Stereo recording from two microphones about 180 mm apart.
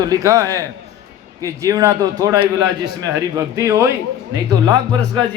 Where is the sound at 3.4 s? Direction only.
15° right (ahead or behind).